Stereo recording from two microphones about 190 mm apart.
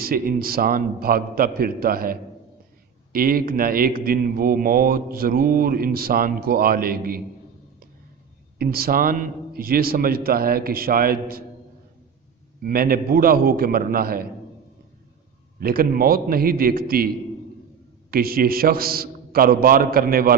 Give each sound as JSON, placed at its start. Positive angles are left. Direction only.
{"t": 0.0, "sound": "a man's voice", "side_deg": -50}
{"t": 8.5, "sound": "a man's voice", "side_deg": -50}
{"t": 12.6, "sound": "a man's voice", "side_deg": -50}
{"t": 15.6, "sound": "a man's voice", "side_deg": -50}
{"t": 18.1, "sound": "a man's voice", "side_deg": -50}